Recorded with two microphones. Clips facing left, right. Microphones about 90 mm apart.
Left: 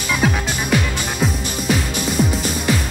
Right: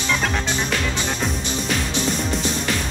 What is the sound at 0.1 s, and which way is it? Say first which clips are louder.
Music: left 3 dB; 10° left (ahead or behind).